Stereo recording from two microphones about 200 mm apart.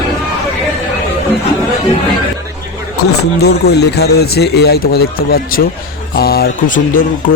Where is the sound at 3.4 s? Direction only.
55° left (ahead or behind).